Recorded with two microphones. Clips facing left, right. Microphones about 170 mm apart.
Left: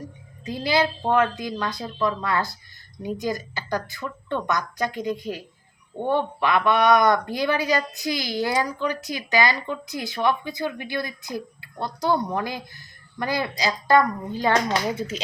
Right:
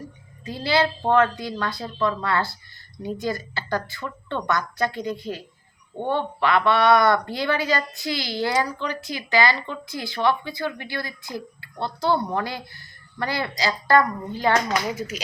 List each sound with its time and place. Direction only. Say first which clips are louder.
0.4 s speech: even; 20° left (ahead or behind)
14.7 s speech: left 1 dB; 30° left (ahead or behind)